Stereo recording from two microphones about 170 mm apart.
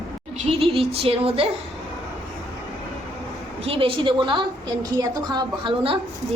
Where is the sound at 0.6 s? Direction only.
35° right (ahead or behind).